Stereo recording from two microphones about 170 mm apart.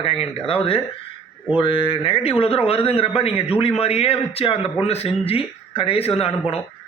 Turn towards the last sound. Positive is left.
turn(degrees=35)  # may be behind; listen again after turning